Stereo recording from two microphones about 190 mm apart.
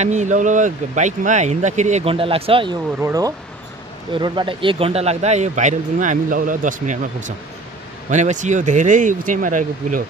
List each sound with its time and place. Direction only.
0.0 s speech: 40° right (ahead or behind)
3.0 s speech: 15° right (ahead or behind); by 10.0 s 40° right (ahead or behind)